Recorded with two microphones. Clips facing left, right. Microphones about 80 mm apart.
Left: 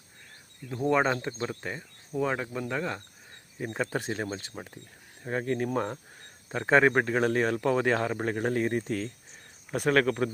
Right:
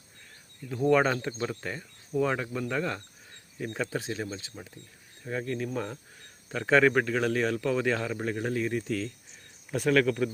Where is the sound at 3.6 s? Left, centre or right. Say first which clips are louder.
Left 1 dB; left.